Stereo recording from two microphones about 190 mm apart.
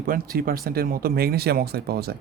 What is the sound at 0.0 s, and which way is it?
Speech, 50° right (ahead or behind).